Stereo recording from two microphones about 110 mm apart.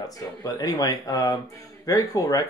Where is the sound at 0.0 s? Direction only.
35° left (ahead or behind).